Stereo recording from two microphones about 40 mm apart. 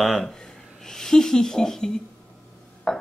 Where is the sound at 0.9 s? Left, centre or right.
Centre.